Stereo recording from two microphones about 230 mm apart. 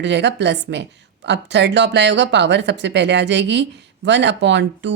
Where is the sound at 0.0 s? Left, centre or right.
Right.